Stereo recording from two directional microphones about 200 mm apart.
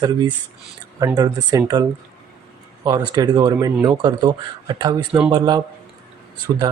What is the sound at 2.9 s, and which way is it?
Speech, 20° right (ahead or behind).